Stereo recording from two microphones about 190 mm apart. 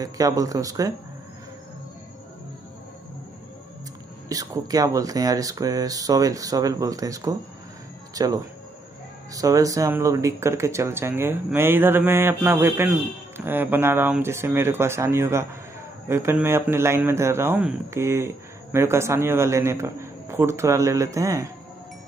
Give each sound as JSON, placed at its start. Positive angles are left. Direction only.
{"t": 0.0, "sound": "a man's voice", "side_deg": -20}
{"t": 4.3, "sound": "a man's voice", "side_deg": -20}